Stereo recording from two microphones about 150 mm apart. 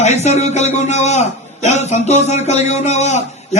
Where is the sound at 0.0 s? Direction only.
50° left (ahead or behind).